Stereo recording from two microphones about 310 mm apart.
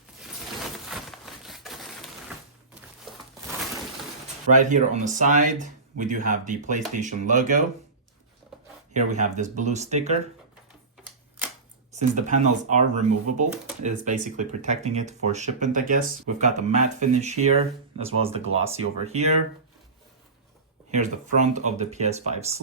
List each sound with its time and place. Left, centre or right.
0.9 s a sound: centre
4.6 s speech: right
9.1 s speech: right
11.9 s speech: right
20.9 s speech: right